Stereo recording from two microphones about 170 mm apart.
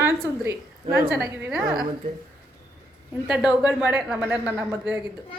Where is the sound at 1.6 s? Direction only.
25° right (ahead or behind).